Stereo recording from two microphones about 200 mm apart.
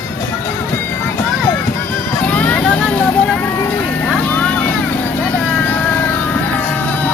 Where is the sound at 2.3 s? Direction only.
5° left (ahead or behind).